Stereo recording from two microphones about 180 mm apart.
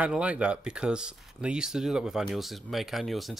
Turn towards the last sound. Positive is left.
turn(degrees=0)  # may be behind; listen again after turning